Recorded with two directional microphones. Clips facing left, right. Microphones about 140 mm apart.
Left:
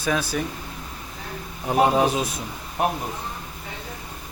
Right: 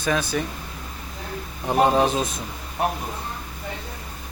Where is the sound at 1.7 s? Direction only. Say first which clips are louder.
Even; 5° left (ahead or behind).